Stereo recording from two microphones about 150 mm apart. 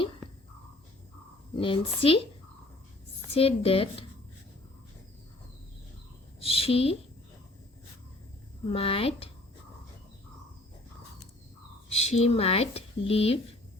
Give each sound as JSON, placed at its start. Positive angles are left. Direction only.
{"t": 1.5, "sound": "speech", "side_deg": 35}
{"t": 3.3, "sound": "speech", "side_deg": 40}
{"t": 6.4, "sound": "speech", "side_deg": 40}
{"t": 8.7, "sound": "speech", "side_deg": 40}
{"t": 12.0, "sound": "speech", "side_deg": 45}